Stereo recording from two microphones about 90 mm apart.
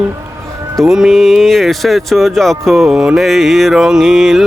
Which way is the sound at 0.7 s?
5° right (ahead or behind).